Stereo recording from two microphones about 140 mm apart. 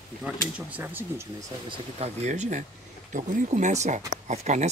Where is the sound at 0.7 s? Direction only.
15° right (ahead or behind).